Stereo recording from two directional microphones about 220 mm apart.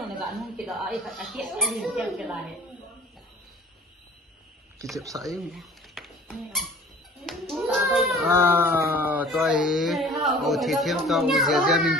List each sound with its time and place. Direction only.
0.1 s speech: centre (ahead or behind)
4.9 s speech: 15° right (ahead or behind)
5.4 s a sound: centre (ahead or behind)
7.2 s a child's voice: centre (ahead or behind)